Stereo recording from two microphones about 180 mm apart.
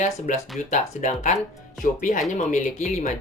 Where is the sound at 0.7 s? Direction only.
40° left (ahead or behind).